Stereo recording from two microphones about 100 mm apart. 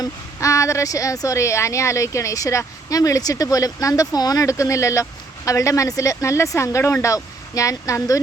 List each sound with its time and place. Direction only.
0.0 s a woman's voice: 35° left (ahead or behind)